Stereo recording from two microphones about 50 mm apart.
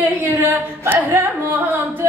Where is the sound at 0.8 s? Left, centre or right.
Right.